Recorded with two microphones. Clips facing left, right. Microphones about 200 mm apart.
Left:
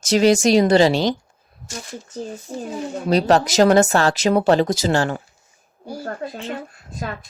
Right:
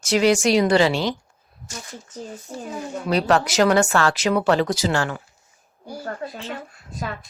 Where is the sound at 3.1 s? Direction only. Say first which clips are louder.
Left 3 dB; 40° left (ahead or behind).